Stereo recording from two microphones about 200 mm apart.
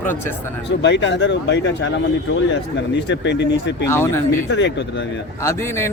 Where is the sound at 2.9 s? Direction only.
60° left (ahead or behind).